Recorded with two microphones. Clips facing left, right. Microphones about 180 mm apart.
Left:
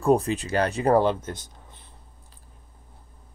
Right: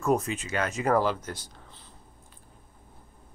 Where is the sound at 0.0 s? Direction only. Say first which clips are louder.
Left 5 dB; 35° left (ahead or behind).